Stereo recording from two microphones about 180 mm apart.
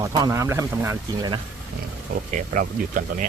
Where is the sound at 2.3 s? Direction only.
45° right (ahead or behind).